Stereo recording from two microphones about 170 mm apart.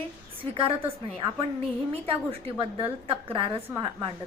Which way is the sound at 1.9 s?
35° right (ahead or behind).